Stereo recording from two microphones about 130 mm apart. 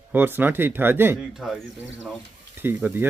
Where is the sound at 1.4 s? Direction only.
Centre (ahead or behind).